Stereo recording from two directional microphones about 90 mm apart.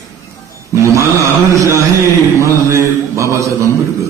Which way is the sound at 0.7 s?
35° right (ahead or behind).